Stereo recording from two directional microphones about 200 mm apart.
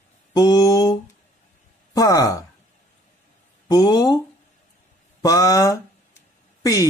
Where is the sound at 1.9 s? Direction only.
15° left (ahead or behind).